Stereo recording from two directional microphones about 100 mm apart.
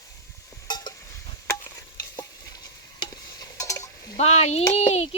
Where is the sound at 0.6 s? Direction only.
45° left (ahead or behind).